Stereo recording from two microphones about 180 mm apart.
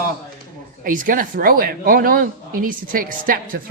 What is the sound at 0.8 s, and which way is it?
Speech, 50° right (ahead or behind).